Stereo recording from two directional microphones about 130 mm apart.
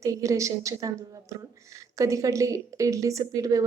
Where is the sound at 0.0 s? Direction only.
25° right (ahead or behind).